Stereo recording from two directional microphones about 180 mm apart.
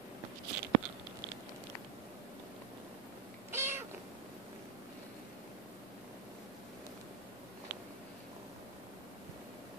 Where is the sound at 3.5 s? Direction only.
15° right (ahead or behind).